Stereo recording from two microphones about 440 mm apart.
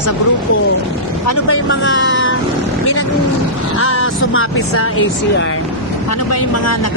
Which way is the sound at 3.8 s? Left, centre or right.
Left.